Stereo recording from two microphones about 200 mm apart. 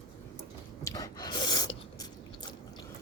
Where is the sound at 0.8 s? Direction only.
15° left (ahead or behind).